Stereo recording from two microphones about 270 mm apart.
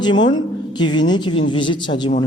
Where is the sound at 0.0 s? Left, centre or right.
Centre.